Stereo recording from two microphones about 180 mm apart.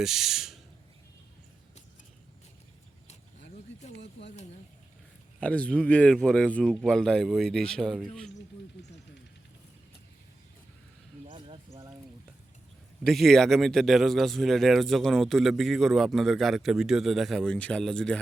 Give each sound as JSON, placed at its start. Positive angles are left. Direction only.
{"t": 0.0, "sound": "speech", "side_deg": 0}
{"t": 3.9, "sound": "speech", "side_deg": 75}
{"t": 5.4, "sound": "speech", "side_deg": 5}
{"t": 11.3, "sound": "a sound", "side_deg": -30}
{"t": 13.1, "sound": "speech", "side_deg": 0}